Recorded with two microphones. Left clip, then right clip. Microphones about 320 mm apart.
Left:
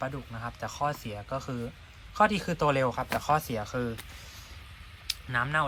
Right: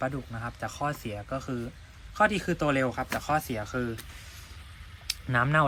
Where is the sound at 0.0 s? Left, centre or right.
Centre.